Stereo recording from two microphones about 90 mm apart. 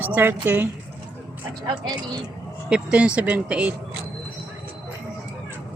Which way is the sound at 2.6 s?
10° right (ahead or behind).